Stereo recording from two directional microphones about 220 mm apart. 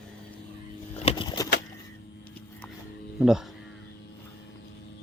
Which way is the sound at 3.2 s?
Centre (ahead or behind).